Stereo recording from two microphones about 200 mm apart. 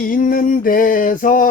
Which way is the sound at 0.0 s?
45° left (ahead or behind).